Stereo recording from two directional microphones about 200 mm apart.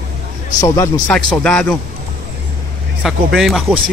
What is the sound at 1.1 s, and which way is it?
Speech, 5° left (ahead or behind).